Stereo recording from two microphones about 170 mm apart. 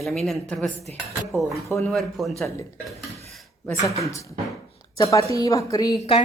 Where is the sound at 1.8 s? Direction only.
Centre (ahead or behind).